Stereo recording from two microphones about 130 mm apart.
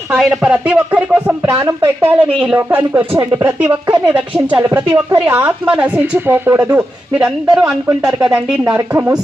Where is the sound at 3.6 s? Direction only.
35° right (ahead or behind).